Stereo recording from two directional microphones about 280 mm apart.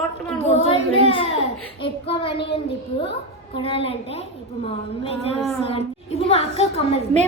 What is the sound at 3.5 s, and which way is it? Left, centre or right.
A child's voice, centre.